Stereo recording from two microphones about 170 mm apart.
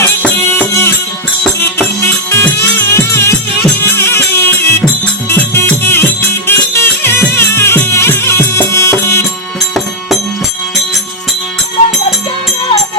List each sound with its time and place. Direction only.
0.5 s music: 15° left (ahead or behind)
2.3 s music: 15° left (ahead or behind)